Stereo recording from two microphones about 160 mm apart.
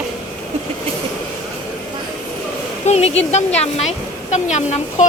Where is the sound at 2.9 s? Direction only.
45° left (ahead or behind).